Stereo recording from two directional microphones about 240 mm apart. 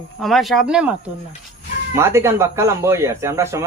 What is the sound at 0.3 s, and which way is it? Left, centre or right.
Speech, centre.